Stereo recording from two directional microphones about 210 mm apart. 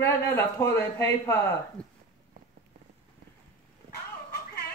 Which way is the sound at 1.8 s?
5° left (ahead or behind).